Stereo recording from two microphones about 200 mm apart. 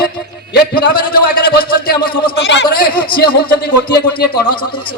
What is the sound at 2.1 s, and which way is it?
Speech, 25° left (ahead or behind).